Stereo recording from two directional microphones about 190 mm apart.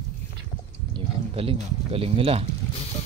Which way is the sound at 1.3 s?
30° right (ahead or behind).